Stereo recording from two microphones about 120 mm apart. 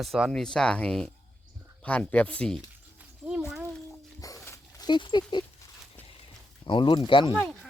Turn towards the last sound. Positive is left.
turn(degrees=45)  # may be behind; listen again after turning